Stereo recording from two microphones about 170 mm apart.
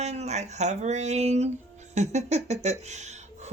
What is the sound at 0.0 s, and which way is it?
Speech, 40° right (ahead or behind).